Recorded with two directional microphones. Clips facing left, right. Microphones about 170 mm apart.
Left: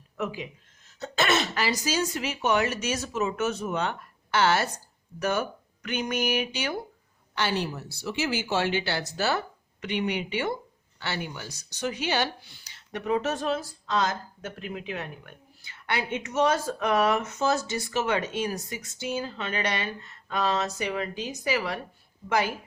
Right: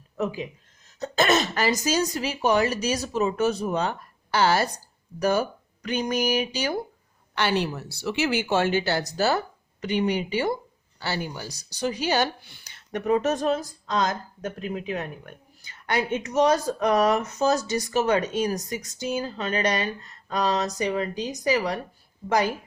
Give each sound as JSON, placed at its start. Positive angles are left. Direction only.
{"t": 0.2, "sound": "speech", "side_deg": -40}
{"t": 7.3, "sound": "speech", "side_deg": -70}
{"t": 12.4, "sound": "speech", "side_deg": -60}